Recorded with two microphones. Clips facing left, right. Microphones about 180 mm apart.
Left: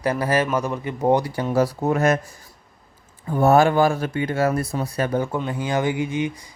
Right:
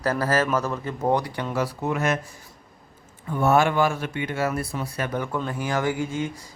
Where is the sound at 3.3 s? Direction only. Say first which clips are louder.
Left 4 dB; 40° left (ahead or behind).